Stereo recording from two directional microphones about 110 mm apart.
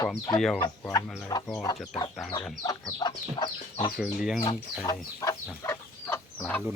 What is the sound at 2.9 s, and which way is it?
Chicken, 40° left (ahead or behind).